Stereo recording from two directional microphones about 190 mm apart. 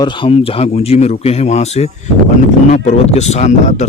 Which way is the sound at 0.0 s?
25° left (ahead or behind).